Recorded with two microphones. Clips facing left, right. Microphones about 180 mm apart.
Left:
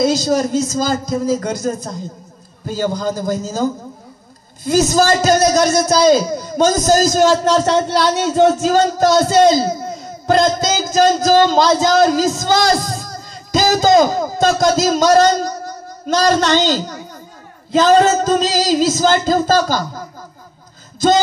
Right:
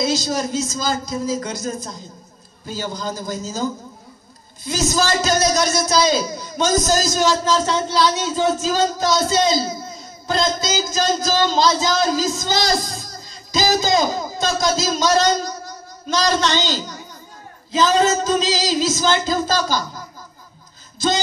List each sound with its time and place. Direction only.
0.0 s a man's voice: 50° left (ahead or behind)
10.6 s a man's voice: 50° left (ahead or behind)
16.3 s a man's voice: 50° left (ahead or behind)